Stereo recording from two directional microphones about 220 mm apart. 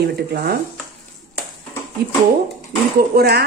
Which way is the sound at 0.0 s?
45° right (ahead or behind).